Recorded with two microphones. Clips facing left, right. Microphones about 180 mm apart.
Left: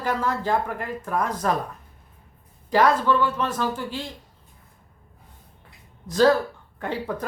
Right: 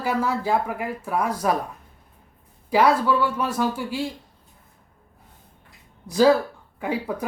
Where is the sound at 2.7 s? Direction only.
10° right (ahead or behind).